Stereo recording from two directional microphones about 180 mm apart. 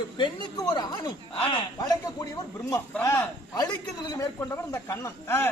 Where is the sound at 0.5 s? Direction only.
25° left (ahead or behind).